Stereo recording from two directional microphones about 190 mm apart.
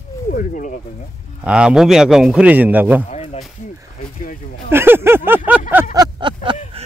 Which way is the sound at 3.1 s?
35° left (ahead or behind).